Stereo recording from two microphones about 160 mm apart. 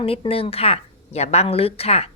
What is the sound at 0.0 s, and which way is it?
A woman's voice, 35° left (ahead or behind).